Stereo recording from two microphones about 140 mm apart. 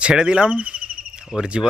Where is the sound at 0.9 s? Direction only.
80° right.